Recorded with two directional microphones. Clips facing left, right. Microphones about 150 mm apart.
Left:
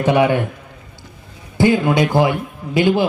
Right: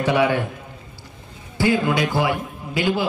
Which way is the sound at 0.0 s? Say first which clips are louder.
Left 4 dB; 20° left (ahead or behind).